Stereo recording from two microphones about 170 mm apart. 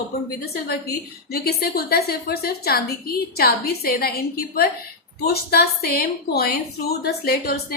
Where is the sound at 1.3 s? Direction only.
65° left (ahead or behind).